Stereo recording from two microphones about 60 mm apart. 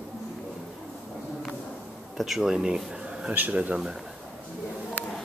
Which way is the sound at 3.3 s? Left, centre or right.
Right.